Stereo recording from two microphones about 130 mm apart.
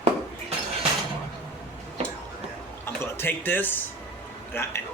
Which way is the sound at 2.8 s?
20° left (ahead or behind).